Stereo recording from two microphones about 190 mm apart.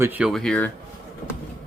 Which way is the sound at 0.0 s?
10° right (ahead or behind).